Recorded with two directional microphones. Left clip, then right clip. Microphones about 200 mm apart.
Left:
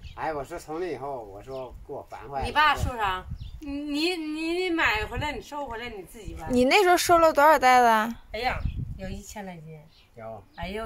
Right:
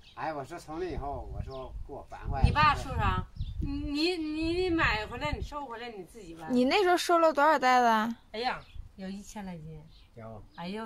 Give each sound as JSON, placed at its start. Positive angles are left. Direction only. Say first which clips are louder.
{"t": 0.2, "sound": "speech", "louder": "left 5 dB", "side_deg": -10}
{"t": 2.4, "sound": "speech", "louder": "left 3 dB", "side_deg": 5}